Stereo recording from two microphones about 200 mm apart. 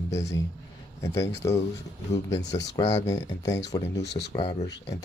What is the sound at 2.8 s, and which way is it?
Speech, 15° left (ahead or behind).